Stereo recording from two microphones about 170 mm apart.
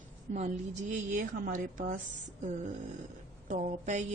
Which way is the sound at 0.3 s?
45° right (ahead or behind).